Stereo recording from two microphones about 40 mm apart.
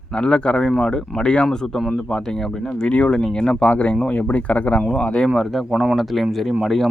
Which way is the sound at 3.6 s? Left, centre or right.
Left.